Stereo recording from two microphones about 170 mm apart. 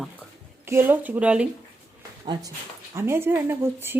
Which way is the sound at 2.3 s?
25° right (ahead or behind).